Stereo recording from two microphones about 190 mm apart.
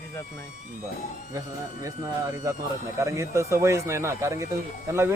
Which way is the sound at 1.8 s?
15° right (ahead or behind).